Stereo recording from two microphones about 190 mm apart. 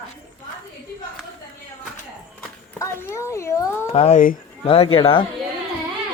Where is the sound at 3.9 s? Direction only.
30° left (ahead or behind).